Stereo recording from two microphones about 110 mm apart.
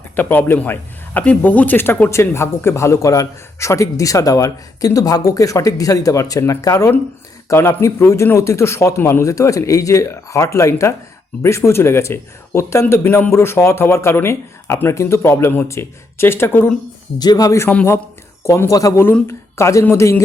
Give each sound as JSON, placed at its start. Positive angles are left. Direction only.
{"t": 0.2, "sound": "speech", "side_deg": 15}
{"t": 17.2, "sound": "speech", "side_deg": 35}